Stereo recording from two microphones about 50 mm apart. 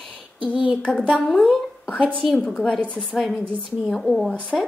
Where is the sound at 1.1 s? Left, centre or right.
Centre.